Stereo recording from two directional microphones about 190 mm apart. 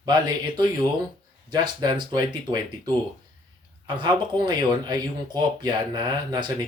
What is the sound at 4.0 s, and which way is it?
Speech, 25° right (ahead or behind).